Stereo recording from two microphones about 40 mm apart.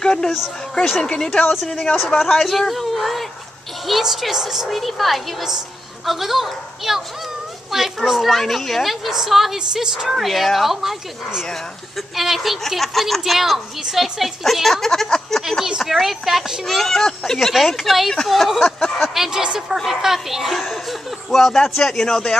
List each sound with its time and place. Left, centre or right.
0.0 s a sound: centre
1.0 s a man's voice: centre
2.1 s a woman's voice: centre
4.6 s a woman's voice: centre
9.6 s a woman's voice: centre
14.2 s a woman's voice: centre
16.6 s a woman's voice: centre
19.4 s a woman's voice: right
19.9 s a child's voice: centre
21.8 s a man's voice: centre